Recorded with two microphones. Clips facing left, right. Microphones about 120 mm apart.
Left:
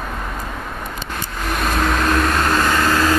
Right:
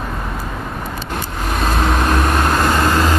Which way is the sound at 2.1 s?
15° right (ahead or behind).